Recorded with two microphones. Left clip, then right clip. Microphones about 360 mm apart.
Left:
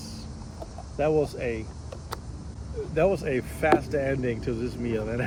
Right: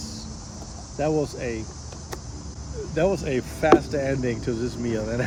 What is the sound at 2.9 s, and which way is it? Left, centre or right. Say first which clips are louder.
Speech: right 1 dB; centre.